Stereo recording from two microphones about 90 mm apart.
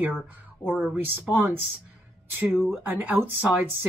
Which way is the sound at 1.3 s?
20° right (ahead or behind).